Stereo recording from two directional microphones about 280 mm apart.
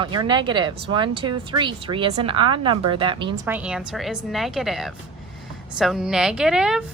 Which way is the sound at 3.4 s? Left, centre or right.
Centre.